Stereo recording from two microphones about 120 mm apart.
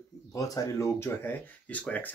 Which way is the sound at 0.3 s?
30° left (ahead or behind).